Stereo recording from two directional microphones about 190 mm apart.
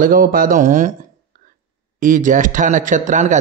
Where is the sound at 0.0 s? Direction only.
45° right (ahead or behind).